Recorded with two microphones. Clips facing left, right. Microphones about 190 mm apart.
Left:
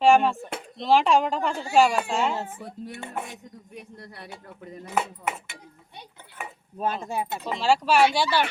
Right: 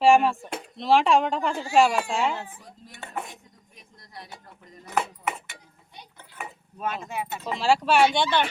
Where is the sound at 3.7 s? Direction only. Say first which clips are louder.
Left 4 dB; 65° left (ahead or behind).